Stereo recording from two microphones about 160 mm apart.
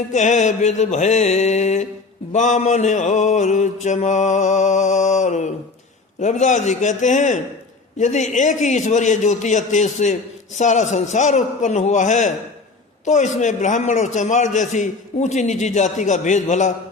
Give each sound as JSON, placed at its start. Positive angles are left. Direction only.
{"t": 0.1, "sound": "a man's voice", "side_deg": 50}